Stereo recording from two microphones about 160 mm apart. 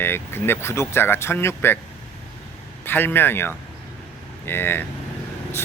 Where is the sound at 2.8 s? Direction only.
10° left (ahead or behind).